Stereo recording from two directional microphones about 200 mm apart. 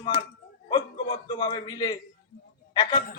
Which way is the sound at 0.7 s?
25° left (ahead or behind).